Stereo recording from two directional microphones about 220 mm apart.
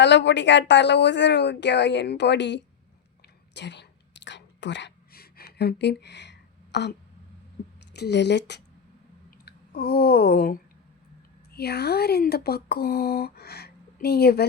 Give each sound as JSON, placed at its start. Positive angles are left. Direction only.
{"t": 0.0, "sound": "speech", "side_deg": 55}
{"t": 3.5, "sound": "whispering", "side_deg": 50}
{"t": 7.9, "sound": "speech", "side_deg": 50}
{"t": 9.5, "sound": "a sound", "side_deg": 45}
{"t": 11.5, "sound": "speech", "side_deg": 45}